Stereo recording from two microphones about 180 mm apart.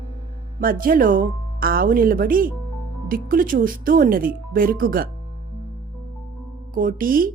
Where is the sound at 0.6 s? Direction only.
50° right (ahead or behind).